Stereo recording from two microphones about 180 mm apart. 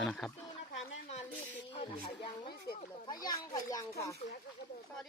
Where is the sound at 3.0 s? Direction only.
20° left (ahead or behind).